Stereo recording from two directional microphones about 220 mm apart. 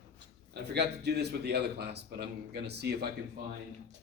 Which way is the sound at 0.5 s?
50° right (ahead or behind).